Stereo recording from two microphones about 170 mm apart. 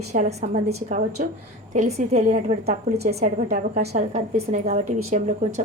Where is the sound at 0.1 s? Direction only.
40° right (ahead or behind).